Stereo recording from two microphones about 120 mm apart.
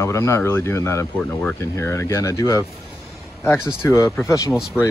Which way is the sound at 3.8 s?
25° left (ahead or behind).